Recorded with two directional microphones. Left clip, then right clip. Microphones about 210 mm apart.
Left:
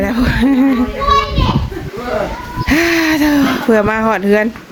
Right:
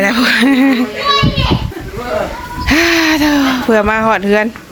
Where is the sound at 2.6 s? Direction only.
10° left (ahead or behind).